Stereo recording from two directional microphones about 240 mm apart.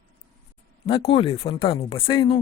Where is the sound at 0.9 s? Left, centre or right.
Left.